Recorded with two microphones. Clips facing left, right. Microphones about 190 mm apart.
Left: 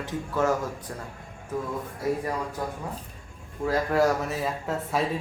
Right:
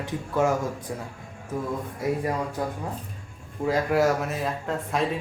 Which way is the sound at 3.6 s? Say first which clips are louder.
Right 2 dB; 20° right (ahead or behind).